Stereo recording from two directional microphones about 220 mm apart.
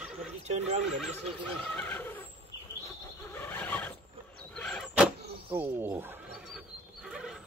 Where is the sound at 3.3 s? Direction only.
10° left (ahead or behind).